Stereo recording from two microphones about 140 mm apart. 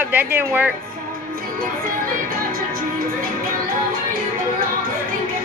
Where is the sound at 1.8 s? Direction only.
90° right.